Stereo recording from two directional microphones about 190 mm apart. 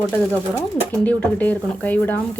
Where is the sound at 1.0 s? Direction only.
10° left (ahead or behind).